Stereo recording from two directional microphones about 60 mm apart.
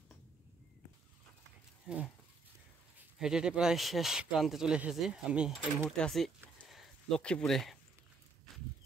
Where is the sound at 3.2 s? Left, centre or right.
Centre.